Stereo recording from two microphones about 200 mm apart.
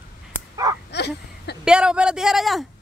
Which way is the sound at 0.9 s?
55° left (ahead or behind).